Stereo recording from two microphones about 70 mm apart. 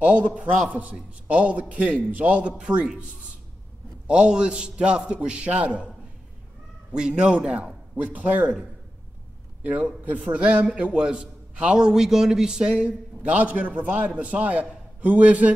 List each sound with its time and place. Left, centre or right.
0.0 s a man's voice: centre
4.1 s a man's voice: centre
9.6 s a man's voice: right